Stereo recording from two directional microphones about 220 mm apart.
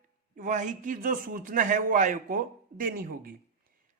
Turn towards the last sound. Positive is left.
turn(degrees=-40)  # may be behind; listen again after turning